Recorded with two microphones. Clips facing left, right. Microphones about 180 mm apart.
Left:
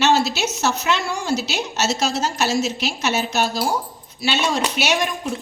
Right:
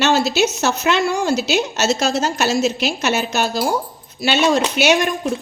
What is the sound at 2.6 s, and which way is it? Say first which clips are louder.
Speech: right 4 dB; 65° right (ahead or behind).